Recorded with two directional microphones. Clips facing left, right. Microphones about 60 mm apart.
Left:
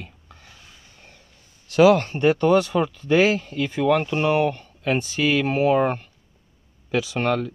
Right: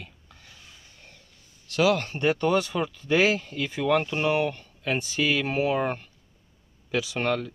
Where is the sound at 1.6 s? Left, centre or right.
Centre.